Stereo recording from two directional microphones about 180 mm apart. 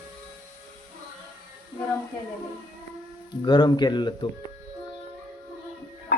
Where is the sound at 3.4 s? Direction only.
25° left (ahead or behind).